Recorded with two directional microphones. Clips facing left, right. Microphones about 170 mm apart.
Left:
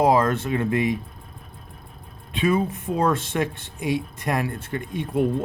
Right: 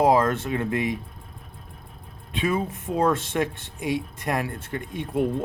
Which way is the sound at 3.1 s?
45° right (ahead or behind).